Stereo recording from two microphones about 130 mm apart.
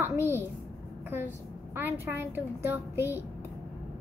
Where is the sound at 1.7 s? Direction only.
15° right (ahead or behind).